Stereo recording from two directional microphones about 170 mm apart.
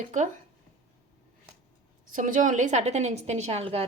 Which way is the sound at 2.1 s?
50° right (ahead or behind).